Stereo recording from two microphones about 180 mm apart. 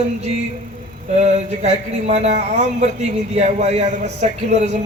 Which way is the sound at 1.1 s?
40° right (ahead or behind).